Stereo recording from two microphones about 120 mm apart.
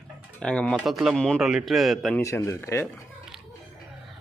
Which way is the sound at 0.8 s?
Centre (ahead or behind).